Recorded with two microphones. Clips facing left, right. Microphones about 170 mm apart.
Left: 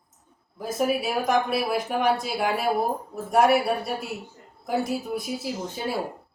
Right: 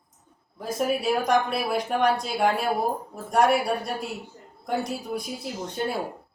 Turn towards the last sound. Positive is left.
turn(degrees=5)  # may be behind; listen again after turning